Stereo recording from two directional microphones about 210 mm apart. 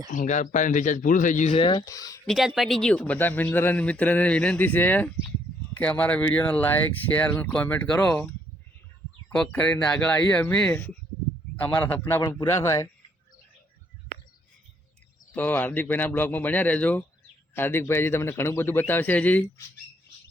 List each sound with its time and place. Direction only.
0.1 s speech: 35° left (ahead or behind); by 2.2 s 15° left (ahead or behind)
2.2 s speech: centre (ahead or behind)
9.3 s speech: 5° left (ahead or behind)
15.3 s speech: 10° left (ahead or behind)